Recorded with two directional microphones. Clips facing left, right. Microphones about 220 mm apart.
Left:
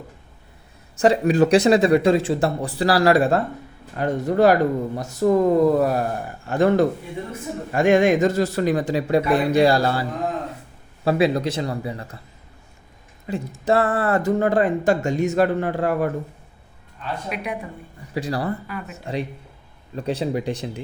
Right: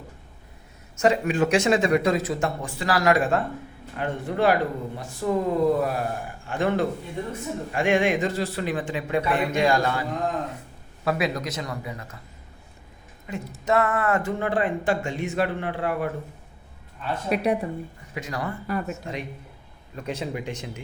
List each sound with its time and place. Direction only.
0.9 s speech: 35° left (ahead or behind)
13.3 s speech: 35° left (ahead or behind)
17.2 s speech: 35° right (ahead or behind)
18.1 s speech: 35° left (ahead or behind)